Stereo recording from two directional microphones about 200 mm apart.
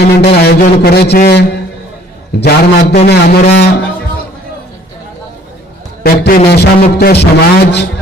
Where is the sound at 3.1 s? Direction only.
55° left (ahead or behind).